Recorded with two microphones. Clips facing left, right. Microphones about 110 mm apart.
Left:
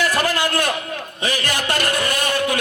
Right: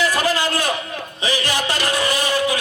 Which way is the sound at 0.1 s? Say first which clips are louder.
Even; 55° left (ahead or behind).